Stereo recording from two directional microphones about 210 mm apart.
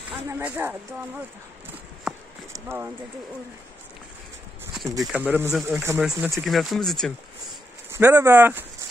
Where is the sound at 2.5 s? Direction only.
10° right (ahead or behind).